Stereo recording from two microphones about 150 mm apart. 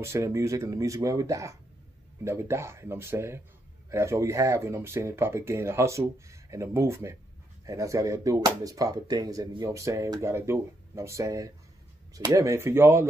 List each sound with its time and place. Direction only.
0.0 s speech: 20° right (ahead or behind)